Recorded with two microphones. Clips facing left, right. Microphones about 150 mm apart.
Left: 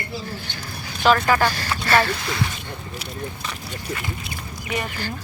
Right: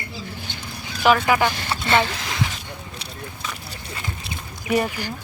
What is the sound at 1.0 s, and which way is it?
Speech, 15° right (ahead or behind).